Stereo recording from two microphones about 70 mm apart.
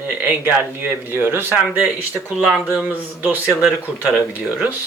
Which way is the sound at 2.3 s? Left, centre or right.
Centre.